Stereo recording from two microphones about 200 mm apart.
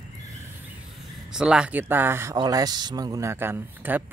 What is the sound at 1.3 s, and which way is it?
Speech, 5° right (ahead or behind).